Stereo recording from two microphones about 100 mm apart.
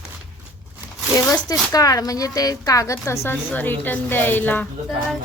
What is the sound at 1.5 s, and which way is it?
A woman's voice, 35° left (ahead or behind).